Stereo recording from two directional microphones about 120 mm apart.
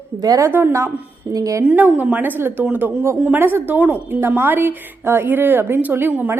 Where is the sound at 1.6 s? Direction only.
10° right (ahead or behind).